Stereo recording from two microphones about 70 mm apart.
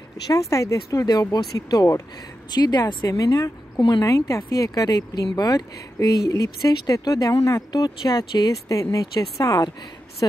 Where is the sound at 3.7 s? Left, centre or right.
Left.